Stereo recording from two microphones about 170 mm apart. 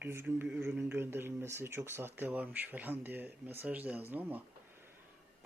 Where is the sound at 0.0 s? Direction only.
15° right (ahead or behind).